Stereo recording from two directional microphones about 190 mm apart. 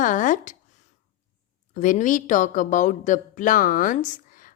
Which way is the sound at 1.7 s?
40° left (ahead or behind).